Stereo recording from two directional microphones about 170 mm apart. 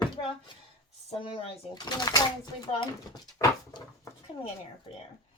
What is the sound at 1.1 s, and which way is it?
Speech, 30° left (ahead or behind).